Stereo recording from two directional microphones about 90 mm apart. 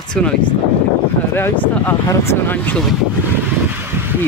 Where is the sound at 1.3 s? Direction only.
25° left (ahead or behind).